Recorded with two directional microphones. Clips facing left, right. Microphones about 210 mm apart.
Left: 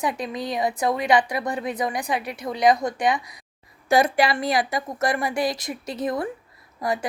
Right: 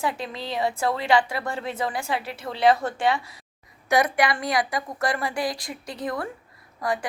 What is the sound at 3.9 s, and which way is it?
A woman's voice, 30° left (ahead or behind).